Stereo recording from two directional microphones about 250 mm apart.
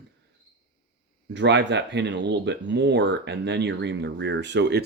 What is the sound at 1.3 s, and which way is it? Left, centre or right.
Speech, right.